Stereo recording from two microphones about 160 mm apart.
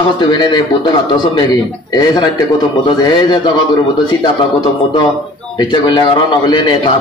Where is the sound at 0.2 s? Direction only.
30° left (ahead or behind).